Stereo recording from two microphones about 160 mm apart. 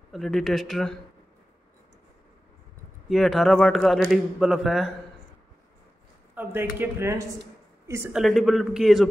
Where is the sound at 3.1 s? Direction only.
Centre (ahead or behind).